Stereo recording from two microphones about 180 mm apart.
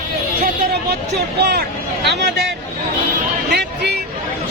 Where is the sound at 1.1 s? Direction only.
70° right (ahead or behind).